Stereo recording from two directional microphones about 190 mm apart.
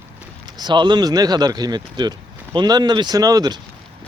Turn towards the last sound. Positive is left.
turn(degrees=-20)  # may be behind; listen again after turning